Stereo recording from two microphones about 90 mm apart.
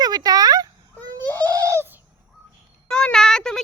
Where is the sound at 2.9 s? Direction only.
5° left (ahead or behind).